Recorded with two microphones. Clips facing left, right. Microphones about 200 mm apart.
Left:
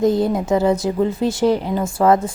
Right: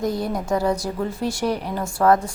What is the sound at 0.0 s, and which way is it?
A woman's voice, 25° left (ahead or behind).